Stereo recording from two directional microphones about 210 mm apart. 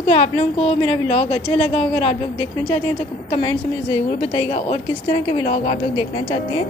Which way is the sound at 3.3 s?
20° left (ahead or behind).